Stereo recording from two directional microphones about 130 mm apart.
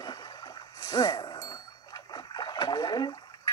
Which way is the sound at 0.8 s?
30° left (ahead or behind).